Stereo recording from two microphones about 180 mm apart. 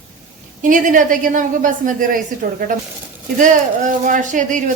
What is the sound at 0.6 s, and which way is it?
A woman's voice, 45° right (ahead or behind).